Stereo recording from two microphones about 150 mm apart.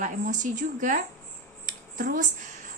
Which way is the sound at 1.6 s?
65° right (ahead or behind).